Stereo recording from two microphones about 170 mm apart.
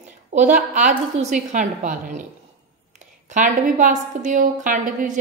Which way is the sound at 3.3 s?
50° right (ahead or behind).